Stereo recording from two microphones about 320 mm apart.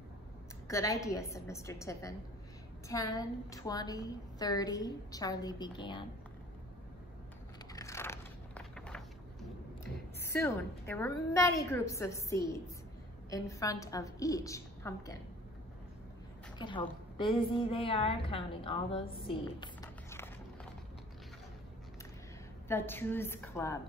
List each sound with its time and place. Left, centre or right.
0.7 s a woman's voice: centre
7.7 s a sound: centre
10.2 s a woman's voice: centre
16.5 s a woman's voice: centre
22.7 s a woman's voice: centre